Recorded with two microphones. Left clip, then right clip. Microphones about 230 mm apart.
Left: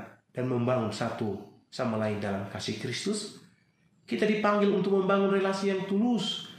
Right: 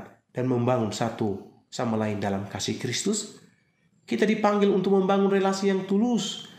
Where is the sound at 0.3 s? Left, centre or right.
Right.